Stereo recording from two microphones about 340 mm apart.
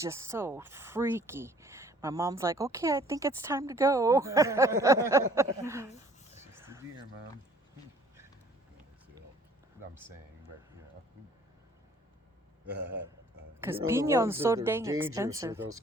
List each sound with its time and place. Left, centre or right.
0.0 s speech: centre
6.5 s a sound: centre
13.6 s speech: centre